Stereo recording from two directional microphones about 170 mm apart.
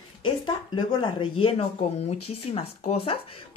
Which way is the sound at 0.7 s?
30° left (ahead or behind).